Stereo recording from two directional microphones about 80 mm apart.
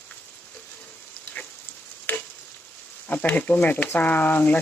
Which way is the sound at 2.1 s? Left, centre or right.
Left.